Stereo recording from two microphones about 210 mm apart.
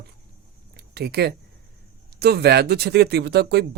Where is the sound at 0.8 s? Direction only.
50° right (ahead or behind).